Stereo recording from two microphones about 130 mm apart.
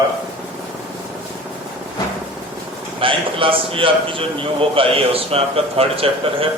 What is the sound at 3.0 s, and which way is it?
A man's voice, 45° right (ahead or behind).